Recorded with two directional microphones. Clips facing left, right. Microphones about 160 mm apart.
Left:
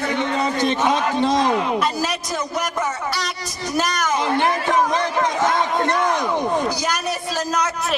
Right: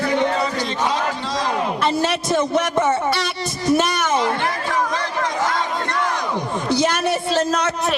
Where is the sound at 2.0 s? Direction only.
25° right (ahead or behind).